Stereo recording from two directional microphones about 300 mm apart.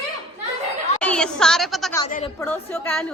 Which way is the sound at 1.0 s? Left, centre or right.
Centre.